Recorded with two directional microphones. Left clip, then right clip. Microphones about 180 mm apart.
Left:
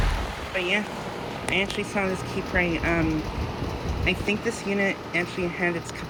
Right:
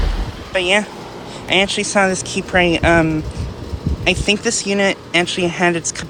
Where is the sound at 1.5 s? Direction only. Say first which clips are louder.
Right 11 dB; 70° right (ahead or behind).